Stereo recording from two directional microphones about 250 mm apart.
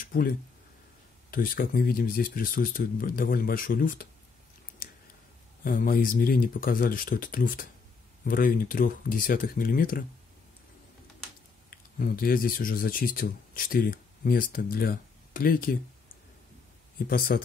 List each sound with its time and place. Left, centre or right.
0.1 s speech: left
1.3 s speech: left
5.6 s speech: left
11.7 s speech: left
17.3 s speech: left